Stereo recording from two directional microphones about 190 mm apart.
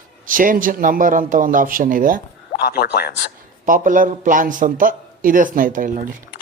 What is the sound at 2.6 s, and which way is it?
Speech, 55° left (ahead or behind).